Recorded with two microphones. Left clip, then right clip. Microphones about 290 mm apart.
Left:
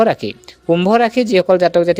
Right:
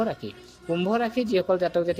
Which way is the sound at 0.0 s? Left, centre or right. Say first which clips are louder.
Left 14 dB; left.